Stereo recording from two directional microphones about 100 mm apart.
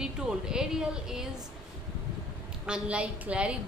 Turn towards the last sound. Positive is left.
turn(degrees=-10)  # may be behind; listen again after turning